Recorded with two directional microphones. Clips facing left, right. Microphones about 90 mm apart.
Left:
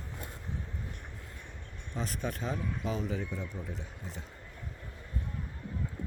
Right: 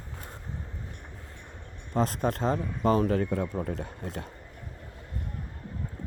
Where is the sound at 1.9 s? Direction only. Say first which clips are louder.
Right 9 dB; 50° right (ahead or behind); by 3.8 s 65° right (ahead or behind).